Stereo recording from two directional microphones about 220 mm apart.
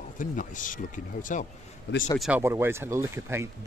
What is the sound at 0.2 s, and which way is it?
Speech, 35° left (ahead or behind).